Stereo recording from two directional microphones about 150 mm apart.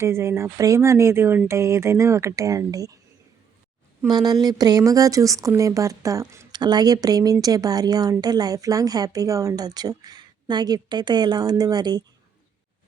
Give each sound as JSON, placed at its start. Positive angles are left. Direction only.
{"t": 0.0, "sound": "speech", "side_deg": -15}
{"t": 4.1, "sound": "speech", "side_deg": -25}